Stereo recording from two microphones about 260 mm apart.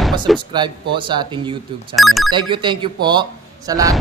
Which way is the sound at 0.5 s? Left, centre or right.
Centre.